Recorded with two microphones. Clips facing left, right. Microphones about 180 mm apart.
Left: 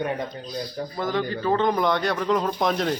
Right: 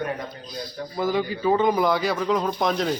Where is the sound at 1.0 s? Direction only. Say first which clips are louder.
Right 2 dB; 10° right (ahead or behind).